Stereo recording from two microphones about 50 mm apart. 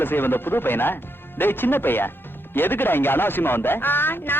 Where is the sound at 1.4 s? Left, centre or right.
Left.